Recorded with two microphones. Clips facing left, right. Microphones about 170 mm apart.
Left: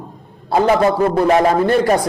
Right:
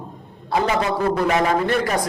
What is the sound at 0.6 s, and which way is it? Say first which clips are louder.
Speech: left 9 dB; 45° left (ahead or behind).